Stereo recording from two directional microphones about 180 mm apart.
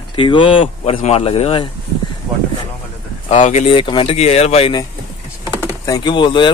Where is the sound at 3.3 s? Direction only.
40° left (ahead or behind).